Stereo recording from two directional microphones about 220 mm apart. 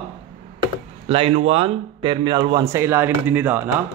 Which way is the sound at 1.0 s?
25° right (ahead or behind).